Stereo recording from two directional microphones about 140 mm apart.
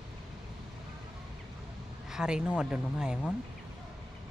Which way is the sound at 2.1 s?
5° right (ahead or behind).